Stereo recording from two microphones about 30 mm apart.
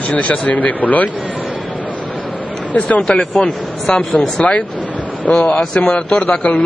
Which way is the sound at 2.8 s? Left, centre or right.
Left.